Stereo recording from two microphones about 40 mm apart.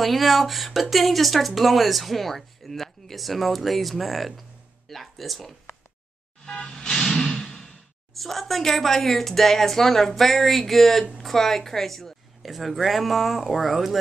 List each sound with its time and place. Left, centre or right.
0.0 s speech: centre
6.4 s music: left
6.8 s speech: centre